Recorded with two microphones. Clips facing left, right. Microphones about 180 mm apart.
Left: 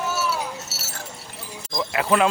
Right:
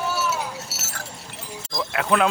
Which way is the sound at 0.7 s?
30° left (ahead or behind).